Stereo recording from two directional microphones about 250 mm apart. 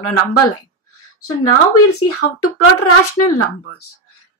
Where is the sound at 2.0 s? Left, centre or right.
Left.